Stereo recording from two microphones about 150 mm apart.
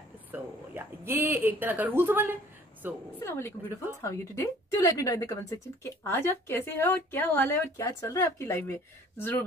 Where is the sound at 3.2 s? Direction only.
15° left (ahead or behind).